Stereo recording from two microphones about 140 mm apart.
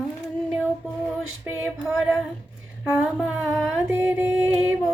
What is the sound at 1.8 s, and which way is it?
Child singing, 5° right (ahead or behind).